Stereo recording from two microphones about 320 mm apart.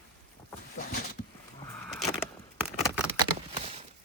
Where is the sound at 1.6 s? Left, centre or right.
Centre.